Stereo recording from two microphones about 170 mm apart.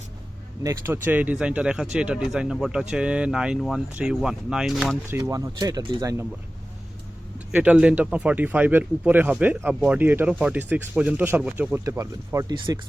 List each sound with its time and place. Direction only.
0.6 s speech: 20° right (ahead or behind); by 4.9 s centre (ahead or behind)
5.0 s speech: 15° right (ahead or behind)
7.3 s speech: 10° right (ahead or behind); by 12.8 s 25° right (ahead or behind)